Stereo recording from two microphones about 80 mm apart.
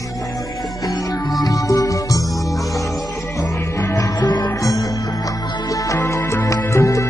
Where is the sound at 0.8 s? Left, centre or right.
Left.